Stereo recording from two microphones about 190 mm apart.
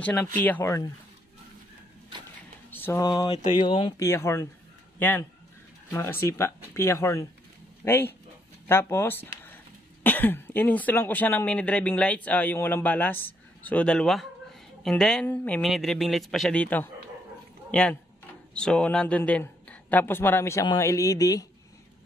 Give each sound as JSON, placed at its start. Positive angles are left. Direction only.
{"t": 0.0, "sound": "speech", "side_deg": 10}
{"t": 2.7, "sound": "a man's voice", "side_deg": 10}